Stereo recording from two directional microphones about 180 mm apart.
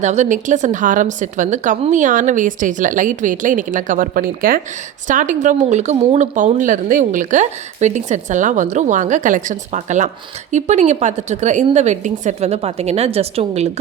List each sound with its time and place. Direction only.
0.0 s a woman's voice: 40° right (ahead or behind)